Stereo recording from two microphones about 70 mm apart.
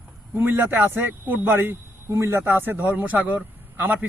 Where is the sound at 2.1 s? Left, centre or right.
Right.